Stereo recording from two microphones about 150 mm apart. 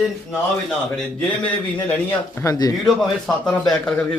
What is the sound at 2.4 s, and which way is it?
Speech, 25° left (ahead or behind).